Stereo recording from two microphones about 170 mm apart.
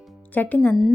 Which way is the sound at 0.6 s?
Centre (ahead or behind).